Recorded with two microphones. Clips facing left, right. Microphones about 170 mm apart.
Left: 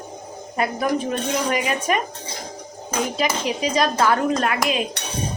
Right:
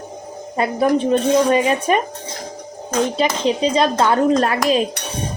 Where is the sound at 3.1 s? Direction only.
30° right (ahead or behind).